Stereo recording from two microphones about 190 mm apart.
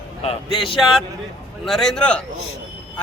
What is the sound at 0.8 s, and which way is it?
A man's voice, centre (ahead or behind).